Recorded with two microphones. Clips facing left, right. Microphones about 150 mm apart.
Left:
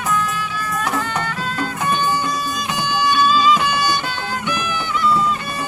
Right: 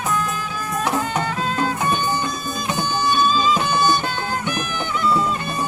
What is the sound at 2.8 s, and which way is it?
Music, 45° right (ahead or behind).